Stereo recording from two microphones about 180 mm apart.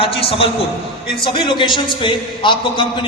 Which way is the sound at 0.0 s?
30° left (ahead or behind).